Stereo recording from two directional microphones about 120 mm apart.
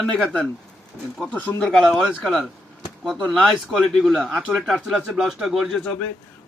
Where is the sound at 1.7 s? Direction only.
Centre (ahead or behind).